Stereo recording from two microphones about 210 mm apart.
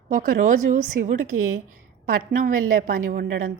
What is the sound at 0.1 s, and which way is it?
A woman's voice, 40° right (ahead or behind).